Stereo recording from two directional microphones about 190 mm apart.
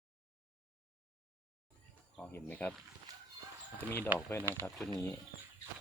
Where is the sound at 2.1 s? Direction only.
10° left (ahead or behind).